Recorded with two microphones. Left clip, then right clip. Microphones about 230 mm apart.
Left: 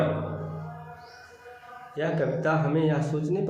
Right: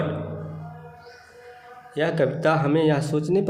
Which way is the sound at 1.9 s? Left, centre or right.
Right.